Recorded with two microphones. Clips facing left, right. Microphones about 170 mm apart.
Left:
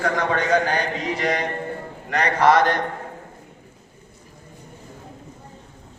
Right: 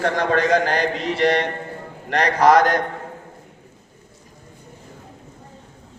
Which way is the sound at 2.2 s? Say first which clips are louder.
Right 2 dB; 40° right (ahead or behind).